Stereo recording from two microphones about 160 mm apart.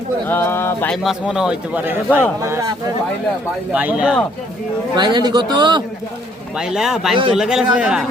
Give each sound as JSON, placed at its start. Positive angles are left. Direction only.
{"t": 0.3, "sound": "speech", "side_deg": 15}
{"t": 1.0, "sound": "a man's voice", "side_deg": -5}
{"t": 3.7, "sound": "a man's voice", "side_deg": -10}
{"t": 4.9, "sound": "a man's voice", "side_deg": -30}
{"t": 6.6, "sound": "speech", "side_deg": -5}